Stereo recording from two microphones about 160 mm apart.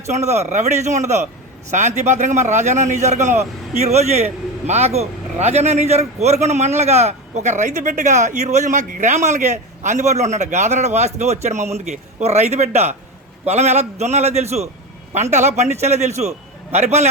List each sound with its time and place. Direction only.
0.0 s a man's voice: 45° right (ahead or behind)